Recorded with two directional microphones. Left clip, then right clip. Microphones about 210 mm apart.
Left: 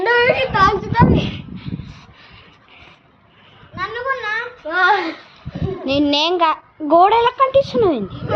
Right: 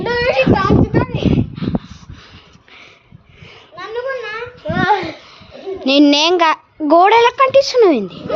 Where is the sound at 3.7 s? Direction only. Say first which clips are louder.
Even; 55° left (ahead or behind).